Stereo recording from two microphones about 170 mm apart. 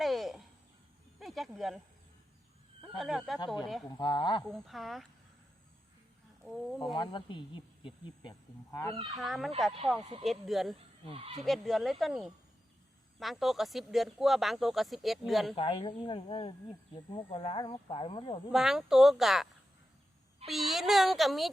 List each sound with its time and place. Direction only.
0.0 s a sound: centre (ahead or behind)
1.2 s speech: centre (ahead or behind)
3.0 s speech: centre (ahead or behind)
3.4 s speech: 25° left (ahead or behind)
4.4 s speech: centre (ahead or behind)
6.4 s speech: centre (ahead or behind)
6.9 s speech: 25° left (ahead or behind)
9.1 s speech: centre (ahead or behind)
11.0 s speech: 35° right (ahead or behind)
11.4 s speech: centre (ahead or behind)
15.5 s speech: 35° left (ahead or behind)
18.5 s speech: centre (ahead or behind)
20.5 s speech: centre (ahead or behind)